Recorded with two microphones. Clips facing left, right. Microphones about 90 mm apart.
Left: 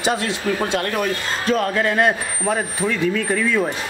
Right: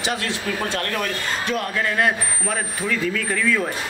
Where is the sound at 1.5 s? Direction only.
30° left (ahead or behind).